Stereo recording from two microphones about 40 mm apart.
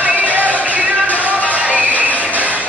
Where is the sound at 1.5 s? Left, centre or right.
Right.